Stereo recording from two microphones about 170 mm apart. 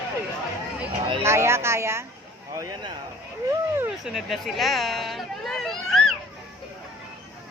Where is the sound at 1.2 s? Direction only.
15° right (ahead or behind).